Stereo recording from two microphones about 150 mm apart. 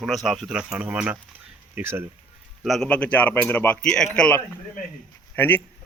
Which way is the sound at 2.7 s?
5° left (ahead or behind).